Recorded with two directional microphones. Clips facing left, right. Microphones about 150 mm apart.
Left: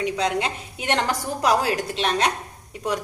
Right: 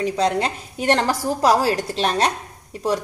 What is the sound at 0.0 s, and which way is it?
A woman's voice, 40° right (ahead or behind).